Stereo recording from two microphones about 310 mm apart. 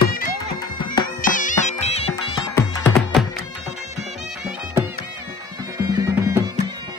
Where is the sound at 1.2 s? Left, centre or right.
Left.